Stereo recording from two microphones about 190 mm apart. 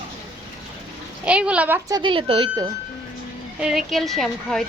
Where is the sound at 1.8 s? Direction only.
25° right (ahead or behind).